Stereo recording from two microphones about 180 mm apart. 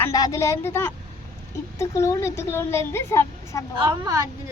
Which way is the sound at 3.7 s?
25° right (ahead or behind).